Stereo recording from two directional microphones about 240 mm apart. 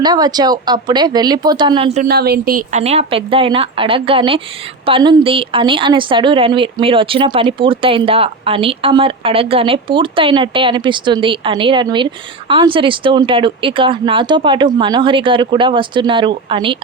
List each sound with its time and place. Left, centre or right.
0.0 s speech: centre
2.0 s a woman's voice: right